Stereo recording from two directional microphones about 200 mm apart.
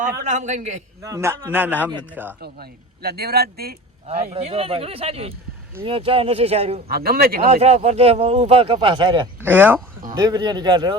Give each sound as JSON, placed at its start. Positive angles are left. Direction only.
{"t": 0.3, "sound": "a man's voice", "side_deg": -35}
{"t": 1.0, "sound": "a man's voice", "side_deg": -15}
{"t": 2.4, "sound": "speech", "side_deg": -50}
{"t": 4.0, "sound": "speech", "side_deg": -35}
{"t": 6.8, "sound": "speech", "side_deg": -50}
{"t": 7.4, "sound": "speech", "side_deg": -30}
{"t": 9.4, "sound": "a man's voice", "side_deg": -10}
{"t": 10.2, "sound": "speech", "side_deg": -20}